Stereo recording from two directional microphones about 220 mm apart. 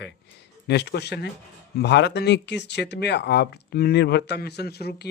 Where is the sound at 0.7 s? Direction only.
50° left (ahead or behind).